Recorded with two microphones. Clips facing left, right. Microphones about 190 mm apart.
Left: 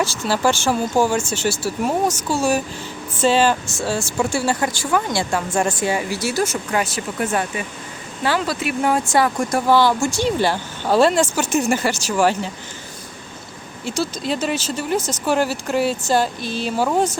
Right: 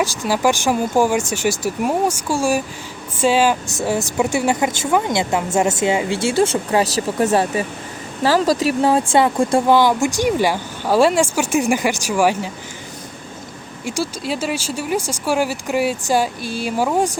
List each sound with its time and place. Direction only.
0.0 s speech: 15° right (ahead or behind)
9.6 s speech: 15° right (ahead or behind)
13.8 s speech: 10° right (ahead or behind)